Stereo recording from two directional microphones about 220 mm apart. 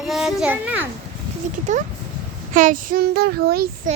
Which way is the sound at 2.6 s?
40° right (ahead or behind).